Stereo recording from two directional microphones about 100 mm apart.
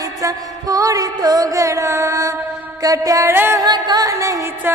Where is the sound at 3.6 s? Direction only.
45° right (ahead or behind).